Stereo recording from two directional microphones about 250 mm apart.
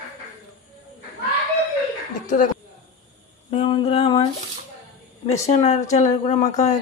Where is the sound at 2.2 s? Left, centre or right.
Left.